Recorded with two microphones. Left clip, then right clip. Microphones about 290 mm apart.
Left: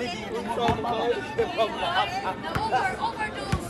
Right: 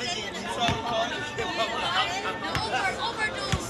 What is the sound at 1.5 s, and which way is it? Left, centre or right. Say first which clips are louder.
Chatter: right 2 dB; left.